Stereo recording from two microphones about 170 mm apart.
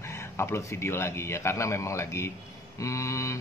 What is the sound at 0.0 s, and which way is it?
Speech, 15° left (ahead or behind).